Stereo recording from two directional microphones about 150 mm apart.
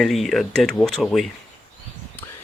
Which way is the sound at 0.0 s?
Centre (ahead or behind).